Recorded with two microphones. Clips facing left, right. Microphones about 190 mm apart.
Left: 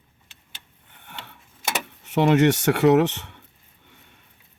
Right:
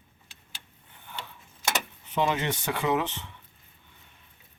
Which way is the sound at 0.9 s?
65° left (ahead or behind).